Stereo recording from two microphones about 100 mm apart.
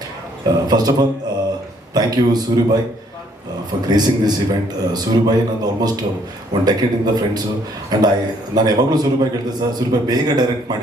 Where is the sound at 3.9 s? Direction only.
45° right (ahead or behind).